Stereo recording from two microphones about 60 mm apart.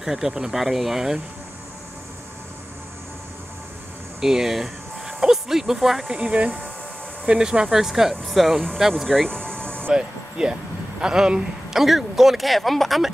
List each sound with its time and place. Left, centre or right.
0.0 s speech: centre
4.2 s speech: centre
6.0 s speech: centre
9.3 s a sound: centre
9.9 s speech: centre